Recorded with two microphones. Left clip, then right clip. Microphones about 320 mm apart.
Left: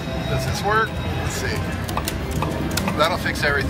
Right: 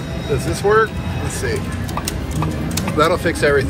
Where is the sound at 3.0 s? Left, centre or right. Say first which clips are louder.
Right 6 dB; centre.